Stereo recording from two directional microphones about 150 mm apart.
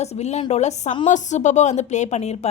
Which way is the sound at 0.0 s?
45° left (ahead or behind).